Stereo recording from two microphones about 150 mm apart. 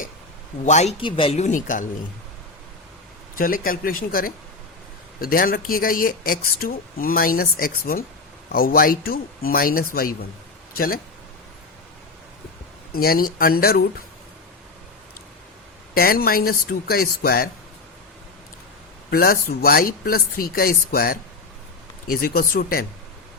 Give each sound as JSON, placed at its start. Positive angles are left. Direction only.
{"t": 0.6, "sound": "speech", "side_deg": 50}
{"t": 1.0, "sound": "speech", "side_deg": 35}
{"t": 3.3, "sound": "speech", "side_deg": 70}
{"t": 10.8, "sound": "speech", "side_deg": 75}
{"t": 12.9, "sound": "speech", "side_deg": 85}
{"t": 16.0, "sound": "speech", "side_deg": 85}
{"t": 19.1, "sound": "speech", "side_deg": 85}